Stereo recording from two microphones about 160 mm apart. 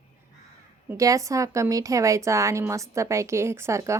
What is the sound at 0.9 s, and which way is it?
A woman's voice, 20° right (ahead or behind).